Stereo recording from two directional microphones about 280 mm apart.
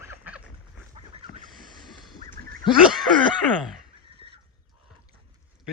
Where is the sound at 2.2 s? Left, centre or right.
Right.